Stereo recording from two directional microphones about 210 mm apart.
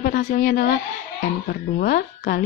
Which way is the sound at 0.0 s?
40° left (ahead or behind).